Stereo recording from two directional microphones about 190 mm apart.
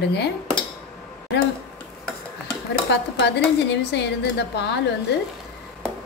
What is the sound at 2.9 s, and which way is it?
A woman's voice, 65° left (ahead or behind).